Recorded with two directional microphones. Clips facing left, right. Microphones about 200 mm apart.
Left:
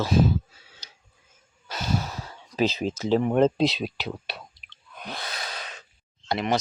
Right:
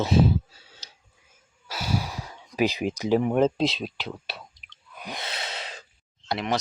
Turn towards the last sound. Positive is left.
turn(degrees=0)  # may be behind; listen again after turning